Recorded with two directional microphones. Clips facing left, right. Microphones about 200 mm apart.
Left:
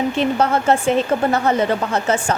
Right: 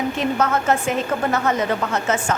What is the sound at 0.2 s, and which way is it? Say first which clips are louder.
A woman's voice: left 3 dB; 30° left (ahead or behind).